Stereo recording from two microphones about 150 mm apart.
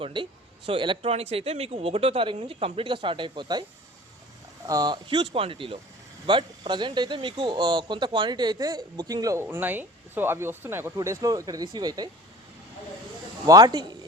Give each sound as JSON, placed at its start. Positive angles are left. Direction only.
{"t": 0.0, "sound": "speech", "side_deg": -35}
{"t": 4.6, "sound": "speech", "side_deg": -25}
{"t": 13.5, "sound": "speech", "side_deg": -25}